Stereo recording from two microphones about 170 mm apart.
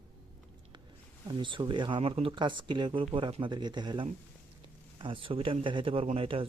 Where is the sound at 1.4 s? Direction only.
30° right (ahead or behind).